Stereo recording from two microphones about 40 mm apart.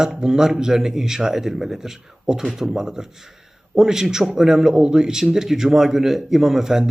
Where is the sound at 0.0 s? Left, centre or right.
Centre.